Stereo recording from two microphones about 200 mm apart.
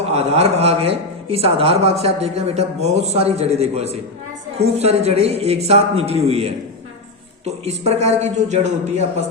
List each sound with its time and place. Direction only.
0.1 s speech: 30° right (ahead or behind)